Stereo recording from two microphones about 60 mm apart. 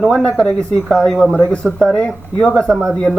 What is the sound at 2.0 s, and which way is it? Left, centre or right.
Speech, centre.